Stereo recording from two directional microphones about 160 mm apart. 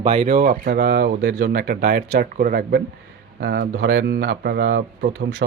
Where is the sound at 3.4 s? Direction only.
85° right.